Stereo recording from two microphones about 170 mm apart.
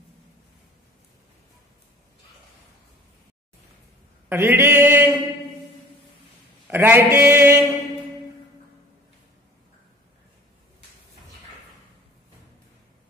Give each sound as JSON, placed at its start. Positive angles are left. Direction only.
{"t": 4.3, "sound": "mantra", "side_deg": -15}
{"t": 6.7, "sound": "mantra", "side_deg": -10}